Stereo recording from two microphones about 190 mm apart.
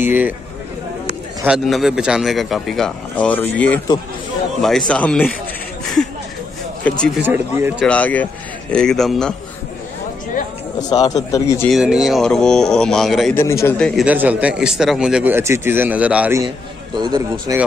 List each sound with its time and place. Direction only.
0.0 s speech: 10° right (ahead or behind)
1.4 s a man's voice: 5° right (ahead or behind)
6.8 s a man's voice: 5° left (ahead or behind)
7.2 s speech: 10° right (ahead or behind)
7.8 s a man's voice: 5° left (ahead or behind)
10.9 s a man's voice: 20° left (ahead or behind)
11.7 s a man's voice: 5° right (ahead or behind)
13.3 s a man's voice: 15° left (ahead or behind)
14.0 s speech: 10° right (ahead or behind)
16.3 s a man's voice: 25° right (ahead or behind)